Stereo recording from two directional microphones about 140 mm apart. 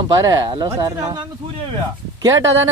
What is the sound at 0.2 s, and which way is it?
Speech, 25° right (ahead or behind).